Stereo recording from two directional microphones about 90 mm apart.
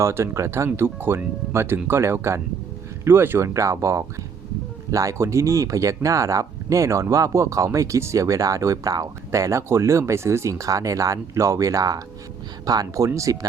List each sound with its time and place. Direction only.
0.0 s speech: 30° right (ahead or behind)